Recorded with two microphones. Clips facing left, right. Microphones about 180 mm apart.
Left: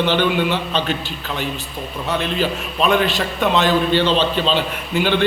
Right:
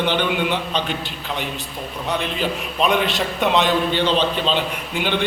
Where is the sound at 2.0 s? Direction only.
15° right (ahead or behind).